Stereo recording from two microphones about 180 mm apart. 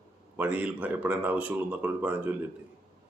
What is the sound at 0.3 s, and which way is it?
Speech, 10° right (ahead or behind).